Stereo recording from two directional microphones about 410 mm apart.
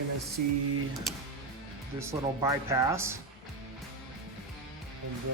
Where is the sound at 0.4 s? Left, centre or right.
Right.